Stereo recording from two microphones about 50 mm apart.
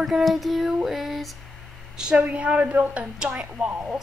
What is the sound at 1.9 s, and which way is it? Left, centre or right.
A woman's voice, centre.